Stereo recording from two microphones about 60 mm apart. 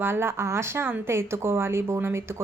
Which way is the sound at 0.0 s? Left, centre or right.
Right.